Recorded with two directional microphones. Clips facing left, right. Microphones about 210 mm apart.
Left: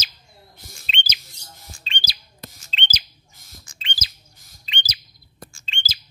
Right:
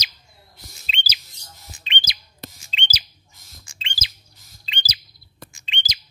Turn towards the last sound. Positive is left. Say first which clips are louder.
# right 1 dB
turn(degrees=-15)  # may be behind; listen again after turning